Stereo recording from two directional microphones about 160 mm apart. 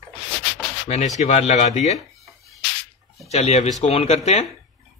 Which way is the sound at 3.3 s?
40° left (ahead or behind).